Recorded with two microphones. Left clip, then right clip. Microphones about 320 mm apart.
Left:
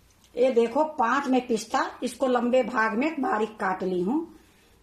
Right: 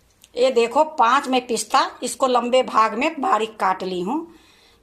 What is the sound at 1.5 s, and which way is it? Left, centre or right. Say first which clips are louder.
Speech: right 7 dB; right.